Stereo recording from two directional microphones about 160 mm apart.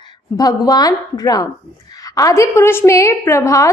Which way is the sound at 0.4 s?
25° left (ahead or behind).